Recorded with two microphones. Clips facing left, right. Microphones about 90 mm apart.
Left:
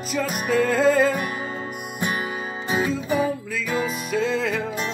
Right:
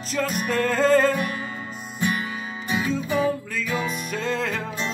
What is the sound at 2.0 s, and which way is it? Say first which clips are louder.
Music: right 1 dB; 30° left (ahead or behind).